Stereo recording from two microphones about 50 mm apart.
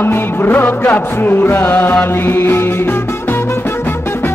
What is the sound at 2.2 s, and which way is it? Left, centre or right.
Chant, left.